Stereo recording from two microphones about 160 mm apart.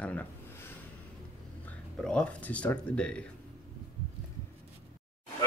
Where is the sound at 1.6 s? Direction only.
5° left (ahead or behind).